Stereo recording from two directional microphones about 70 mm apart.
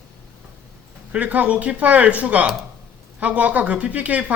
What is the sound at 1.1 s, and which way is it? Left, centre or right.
Speech, right.